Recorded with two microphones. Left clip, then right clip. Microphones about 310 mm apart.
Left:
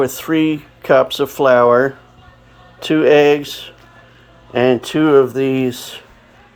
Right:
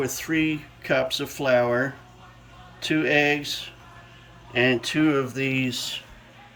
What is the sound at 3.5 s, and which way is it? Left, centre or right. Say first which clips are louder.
Speech: left 2 dB; centre.